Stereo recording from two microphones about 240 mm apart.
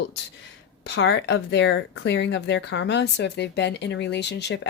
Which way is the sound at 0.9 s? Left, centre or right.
Left.